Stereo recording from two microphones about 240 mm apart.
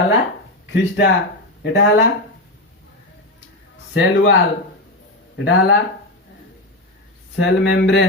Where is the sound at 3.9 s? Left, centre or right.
Left.